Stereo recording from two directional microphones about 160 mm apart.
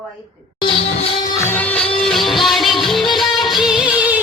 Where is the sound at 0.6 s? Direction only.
35° left (ahead or behind).